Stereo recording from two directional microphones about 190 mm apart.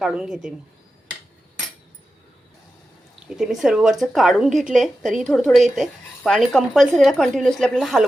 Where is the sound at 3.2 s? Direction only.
Centre (ahead or behind).